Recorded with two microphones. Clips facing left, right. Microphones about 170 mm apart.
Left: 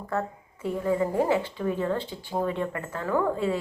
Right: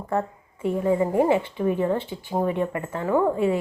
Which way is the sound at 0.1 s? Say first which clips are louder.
Right 4 dB; 20° right (ahead or behind).